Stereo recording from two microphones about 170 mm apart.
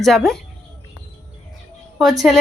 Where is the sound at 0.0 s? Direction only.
Centre (ahead or behind).